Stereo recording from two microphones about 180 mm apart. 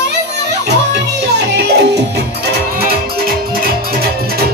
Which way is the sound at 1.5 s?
70° right (ahead or behind).